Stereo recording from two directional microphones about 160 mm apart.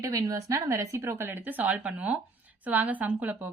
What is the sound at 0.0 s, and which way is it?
A woman's voice, 20° right (ahead or behind).